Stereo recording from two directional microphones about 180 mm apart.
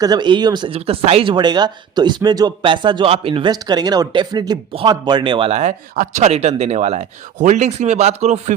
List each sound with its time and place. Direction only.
0.0 s speech: 25° right (ahead or behind)